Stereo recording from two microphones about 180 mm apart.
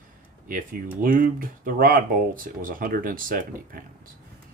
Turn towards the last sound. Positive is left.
turn(degrees=-50)  # may be behind; listen again after turning